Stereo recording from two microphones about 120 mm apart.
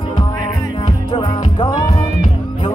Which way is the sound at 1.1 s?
40° left (ahead or behind).